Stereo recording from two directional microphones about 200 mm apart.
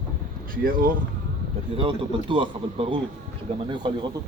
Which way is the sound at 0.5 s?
45° right (ahead or behind).